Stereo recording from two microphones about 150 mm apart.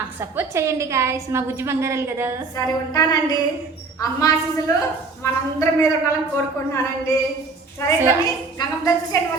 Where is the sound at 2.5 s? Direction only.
25° left (ahead or behind).